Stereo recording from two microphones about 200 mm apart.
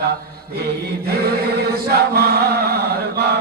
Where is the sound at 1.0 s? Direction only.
50° right (ahead or behind).